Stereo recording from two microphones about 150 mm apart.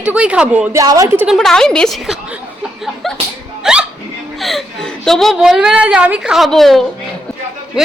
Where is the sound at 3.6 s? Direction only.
5° right (ahead or behind).